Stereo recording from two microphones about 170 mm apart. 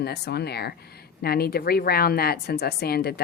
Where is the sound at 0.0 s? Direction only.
70° left (ahead or behind).